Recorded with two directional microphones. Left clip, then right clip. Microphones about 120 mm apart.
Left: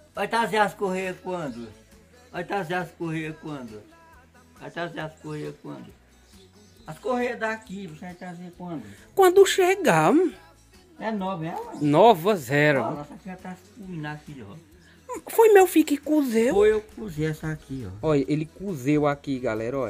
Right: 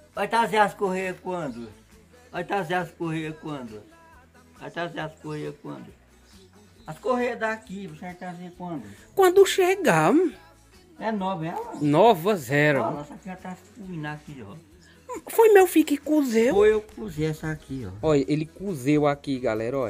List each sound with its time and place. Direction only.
0.1 s speech: centre (ahead or behind)
4.6 s speech: 5° right (ahead or behind)
6.9 s speech: centre (ahead or behind)
13.2 s speech: 15° right (ahead or behind)
13.9 s speech: centre (ahead or behind)
17.8 s speech: 15° right (ahead or behind)